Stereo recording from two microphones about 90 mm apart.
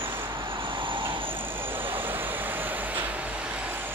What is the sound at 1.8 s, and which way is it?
Vehicle, 25° right (ahead or behind).